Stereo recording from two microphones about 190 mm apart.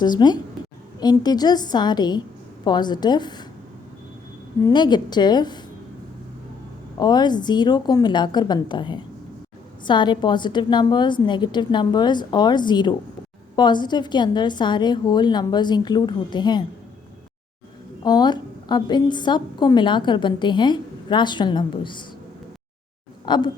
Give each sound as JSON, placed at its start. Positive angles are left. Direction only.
{"t": 0.0, "sound": "a woman's voice", "side_deg": 20}
{"t": 4.6, "sound": "a woman's voice", "side_deg": 25}
{"t": 7.0, "sound": "a woman's voice", "side_deg": 20}
{"t": 18.0, "sound": "a woman's voice", "side_deg": 20}
{"t": 23.2, "sound": "speech", "side_deg": 25}